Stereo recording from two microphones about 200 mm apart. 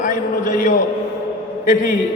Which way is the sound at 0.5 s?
40° left (ahead or behind).